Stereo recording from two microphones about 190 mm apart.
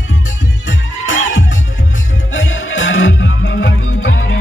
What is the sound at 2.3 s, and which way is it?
Music, 80° left.